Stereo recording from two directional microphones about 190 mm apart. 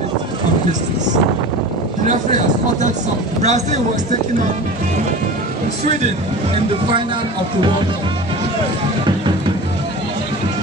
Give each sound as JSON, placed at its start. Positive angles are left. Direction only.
{"t": 3.4, "sound": "a man's voice", "side_deg": -35}